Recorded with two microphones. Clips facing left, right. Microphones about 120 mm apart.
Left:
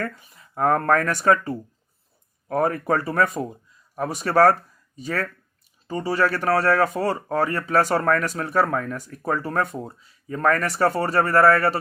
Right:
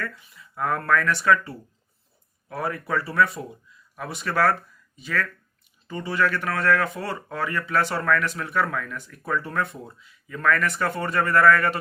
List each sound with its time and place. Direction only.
0.0 s speech: 45° left (ahead or behind)